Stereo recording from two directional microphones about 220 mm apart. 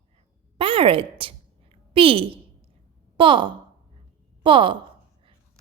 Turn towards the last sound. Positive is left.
turn(degrees=-20)  # may be behind; listen again after turning